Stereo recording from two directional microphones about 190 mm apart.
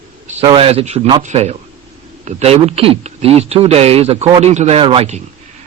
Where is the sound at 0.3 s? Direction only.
30° right (ahead or behind).